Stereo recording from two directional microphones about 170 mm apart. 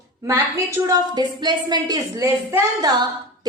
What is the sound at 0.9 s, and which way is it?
A woman's voice, 25° right (ahead or behind).